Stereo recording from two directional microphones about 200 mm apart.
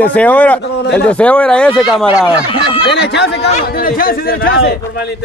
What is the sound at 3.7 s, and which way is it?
A man's voice, 45° left (ahead or behind).